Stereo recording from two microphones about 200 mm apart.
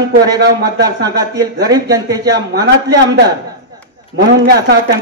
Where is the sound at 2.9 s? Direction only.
55° right (ahead or behind).